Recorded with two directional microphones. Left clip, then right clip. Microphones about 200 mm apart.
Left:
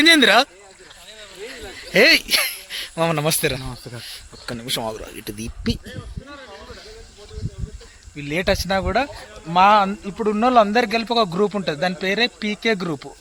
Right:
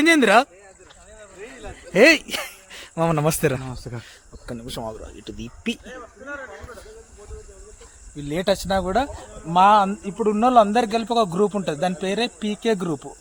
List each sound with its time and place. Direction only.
0.0 s speech: 10° right (ahead or behind)
1.7 s speech: 15° right (ahead or behind)
3.3 s speech: 40° right (ahead or behind)
4.4 s speech: 5° left (ahead or behind)
8.1 s speech: 5° left (ahead or behind)